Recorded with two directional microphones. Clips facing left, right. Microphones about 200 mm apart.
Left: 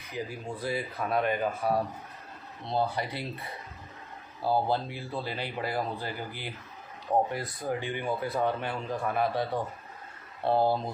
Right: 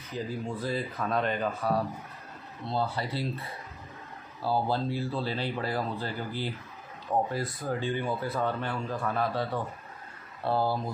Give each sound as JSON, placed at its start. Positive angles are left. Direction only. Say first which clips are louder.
{"t": 0.1, "sound": "speech", "louder": "right 2 dB", "side_deg": 15}